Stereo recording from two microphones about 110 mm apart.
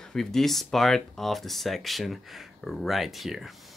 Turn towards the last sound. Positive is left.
turn(degrees=0)  # may be behind; listen again after turning